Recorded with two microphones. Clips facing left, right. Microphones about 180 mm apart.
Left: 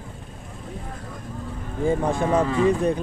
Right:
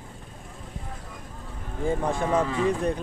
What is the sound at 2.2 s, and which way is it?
Speech, 55° left (ahead or behind).